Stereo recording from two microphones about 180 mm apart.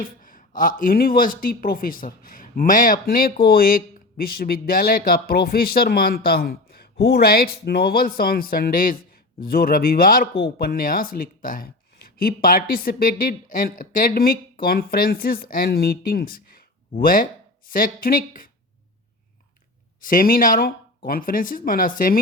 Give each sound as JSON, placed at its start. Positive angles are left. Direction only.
{"t": 0.0, "sound": "speech", "side_deg": 50}
{"t": 20.1, "sound": "speech", "side_deg": 50}